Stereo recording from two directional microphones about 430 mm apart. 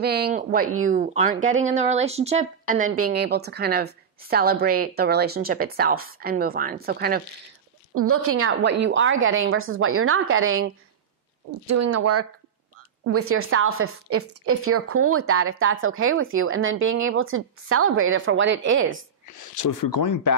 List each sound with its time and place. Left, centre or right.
0.0 s speech: right
19.3 s speech: left